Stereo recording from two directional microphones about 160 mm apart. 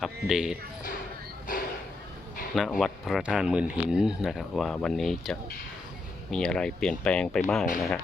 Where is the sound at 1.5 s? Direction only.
60° left (ahead or behind).